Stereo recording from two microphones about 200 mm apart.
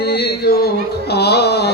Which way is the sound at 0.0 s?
55° left (ahead or behind).